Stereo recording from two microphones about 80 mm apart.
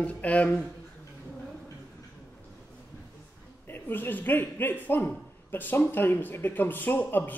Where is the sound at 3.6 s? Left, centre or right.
Left.